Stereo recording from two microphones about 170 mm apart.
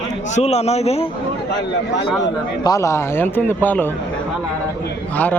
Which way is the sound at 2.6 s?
20° left (ahead or behind).